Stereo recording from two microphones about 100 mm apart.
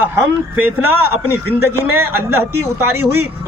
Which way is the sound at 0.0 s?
20° right (ahead or behind).